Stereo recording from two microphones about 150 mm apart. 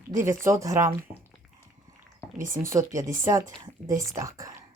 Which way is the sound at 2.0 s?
60° right (ahead or behind).